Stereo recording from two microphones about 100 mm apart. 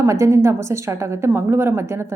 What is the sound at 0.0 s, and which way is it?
Speech, 30° right (ahead or behind).